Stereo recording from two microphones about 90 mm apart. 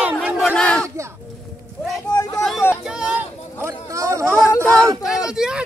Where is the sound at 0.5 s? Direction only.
10° left (ahead or behind).